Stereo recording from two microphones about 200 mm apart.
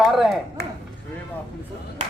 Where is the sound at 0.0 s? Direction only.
Centre (ahead or behind).